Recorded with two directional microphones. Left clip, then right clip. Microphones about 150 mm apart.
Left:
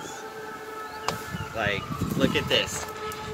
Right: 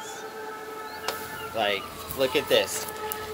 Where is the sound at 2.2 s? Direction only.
30° left (ahead or behind).